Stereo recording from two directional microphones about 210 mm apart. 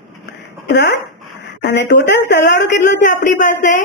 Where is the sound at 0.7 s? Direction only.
55° left (ahead or behind).